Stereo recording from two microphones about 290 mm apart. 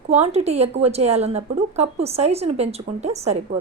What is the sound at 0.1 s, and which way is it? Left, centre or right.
A woman's voice, right.